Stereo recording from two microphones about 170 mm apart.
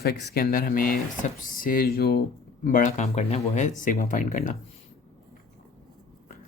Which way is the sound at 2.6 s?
50° left (ahead or behind).